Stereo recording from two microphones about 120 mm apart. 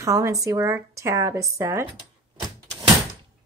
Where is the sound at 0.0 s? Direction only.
30° right (ahead or behind).